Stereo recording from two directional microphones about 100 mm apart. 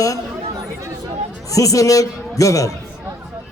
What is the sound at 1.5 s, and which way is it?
A man's voice, 35° left (ahead or behind).